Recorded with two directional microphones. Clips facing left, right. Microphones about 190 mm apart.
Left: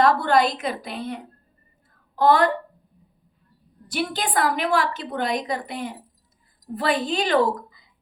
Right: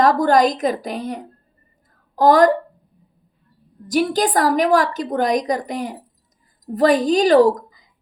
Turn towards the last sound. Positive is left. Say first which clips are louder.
# right 8 dB
turn(degrees=-40)  # may be behind; listen again after turning